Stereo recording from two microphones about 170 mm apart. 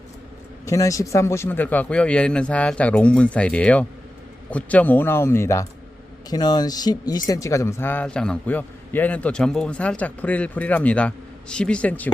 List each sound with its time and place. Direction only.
0.6 s a man's voice: 20° left (ahead or behind)